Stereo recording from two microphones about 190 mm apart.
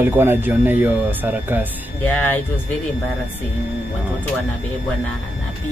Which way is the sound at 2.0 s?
5° left (ahead or behind).